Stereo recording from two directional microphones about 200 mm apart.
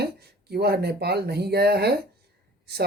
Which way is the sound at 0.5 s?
55° right (ahead or behind).